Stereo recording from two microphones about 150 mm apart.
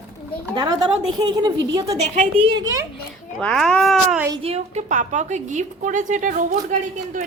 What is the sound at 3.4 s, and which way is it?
Speech, 5° left (ahead or behind).